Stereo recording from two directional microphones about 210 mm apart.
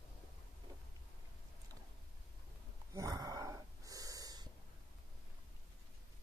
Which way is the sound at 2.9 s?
15° right (ahead or behind).